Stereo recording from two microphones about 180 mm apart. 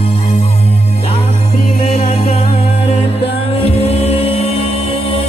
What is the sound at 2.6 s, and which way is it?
Music, 35° left (ahead or behind).